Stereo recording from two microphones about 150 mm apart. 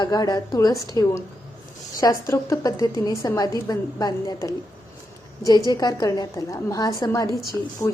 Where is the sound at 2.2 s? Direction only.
20° left (ahead or behind).